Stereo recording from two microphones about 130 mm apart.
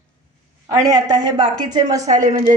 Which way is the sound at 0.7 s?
25° right (ahead or behind).